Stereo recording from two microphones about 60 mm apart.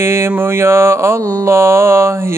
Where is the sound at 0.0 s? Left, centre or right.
Right.